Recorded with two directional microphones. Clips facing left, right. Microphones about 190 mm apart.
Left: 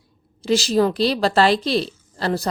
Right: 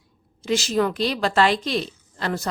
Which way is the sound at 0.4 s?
35° left (ahead or behind).